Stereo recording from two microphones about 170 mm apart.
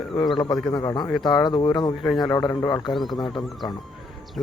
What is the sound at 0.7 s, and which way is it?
A man's voice, 20° left (ahead or behind).